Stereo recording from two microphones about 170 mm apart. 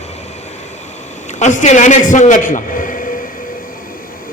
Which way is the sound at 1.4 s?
45° left (ahead or behind).